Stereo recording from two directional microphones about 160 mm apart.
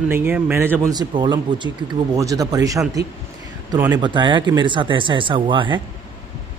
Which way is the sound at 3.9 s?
30° right (ahead or behind).